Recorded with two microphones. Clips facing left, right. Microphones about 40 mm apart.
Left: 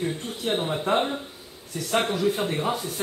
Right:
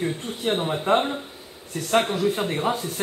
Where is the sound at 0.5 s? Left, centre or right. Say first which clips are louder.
Right 3 dB; centre.